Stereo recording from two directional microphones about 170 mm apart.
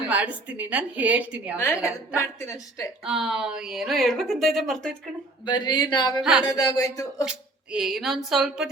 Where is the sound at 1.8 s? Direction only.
15° left (ahead or behind).